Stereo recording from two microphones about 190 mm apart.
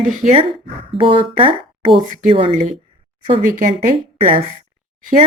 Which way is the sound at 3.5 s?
45° right (ahead or behind).